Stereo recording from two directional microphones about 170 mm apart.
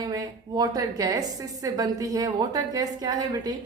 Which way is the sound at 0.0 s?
20° right (ahead or behind).